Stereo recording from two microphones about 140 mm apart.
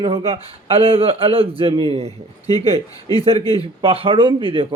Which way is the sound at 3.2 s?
40° right (ahead or behind).